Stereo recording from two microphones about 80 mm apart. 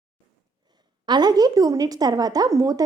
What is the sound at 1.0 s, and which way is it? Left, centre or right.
A woman's voice, right.